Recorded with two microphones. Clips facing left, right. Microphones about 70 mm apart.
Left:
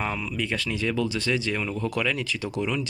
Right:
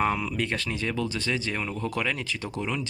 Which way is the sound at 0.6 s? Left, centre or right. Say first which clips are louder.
Left 3 dB; right.